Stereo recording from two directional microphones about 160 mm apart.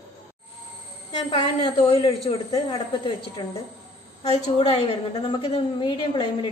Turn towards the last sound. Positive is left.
turn(degrees=30)  # may be behind; listen again after turning